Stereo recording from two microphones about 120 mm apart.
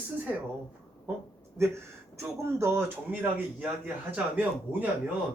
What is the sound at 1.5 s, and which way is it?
Speech, 25° right (ahead or behind).